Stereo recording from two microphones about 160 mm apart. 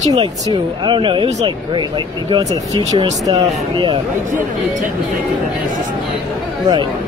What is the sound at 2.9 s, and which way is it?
Speech, 20° right (ahead or behind).